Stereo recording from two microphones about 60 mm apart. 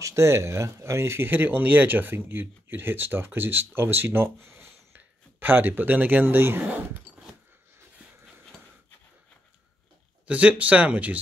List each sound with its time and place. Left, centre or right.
0.0 s speech: right
10.2 s speech: right